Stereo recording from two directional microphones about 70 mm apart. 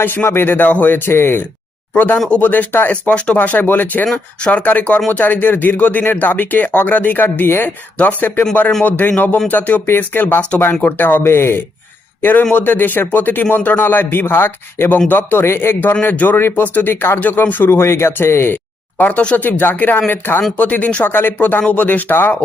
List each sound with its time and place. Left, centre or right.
0.0 s speech: left
2.3 s a man's voice: left
4.0 s speech: centre
4.5 s a man's voice: left